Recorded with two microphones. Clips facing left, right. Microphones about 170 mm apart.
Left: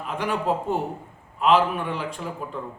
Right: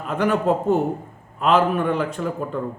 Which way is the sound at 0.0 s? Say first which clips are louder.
Right 6 dB; 45° right (ahead or behind).